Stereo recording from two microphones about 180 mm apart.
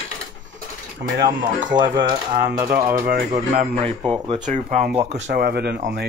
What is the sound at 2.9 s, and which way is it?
Speech, 55° right (ahead or behind).